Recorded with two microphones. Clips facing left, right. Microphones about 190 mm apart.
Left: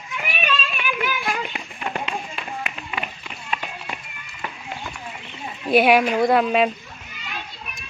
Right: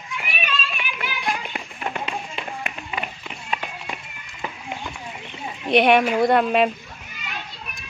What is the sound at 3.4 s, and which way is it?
Run, 15° right (ahead or behind).